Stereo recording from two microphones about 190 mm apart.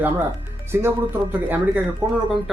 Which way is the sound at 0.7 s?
10° right (ahead or behind).